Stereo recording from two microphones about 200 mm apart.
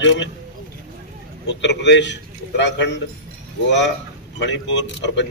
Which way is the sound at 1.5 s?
60° left (ahead or behind).